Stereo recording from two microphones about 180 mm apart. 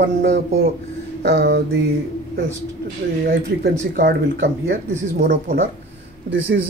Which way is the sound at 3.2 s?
60° right (ahead or behind).